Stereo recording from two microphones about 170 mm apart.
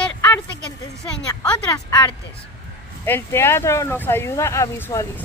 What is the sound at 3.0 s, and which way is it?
Speech, 15° left (ahead or behind).